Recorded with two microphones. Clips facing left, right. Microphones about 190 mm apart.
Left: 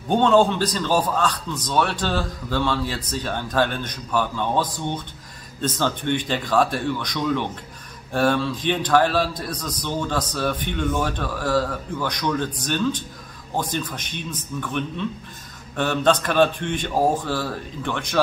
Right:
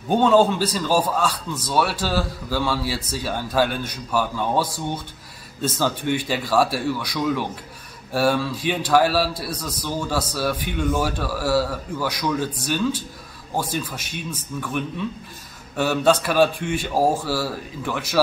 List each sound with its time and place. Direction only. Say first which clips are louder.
0.1 s a man's voice: right 1 dB; 5° right (ahead or behind)